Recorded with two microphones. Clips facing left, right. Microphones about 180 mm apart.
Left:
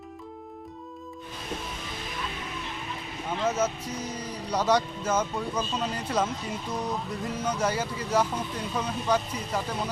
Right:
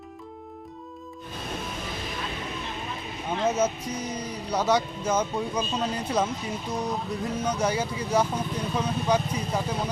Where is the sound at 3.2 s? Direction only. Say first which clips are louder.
Right 2 dB; 20° right (ahead or behind).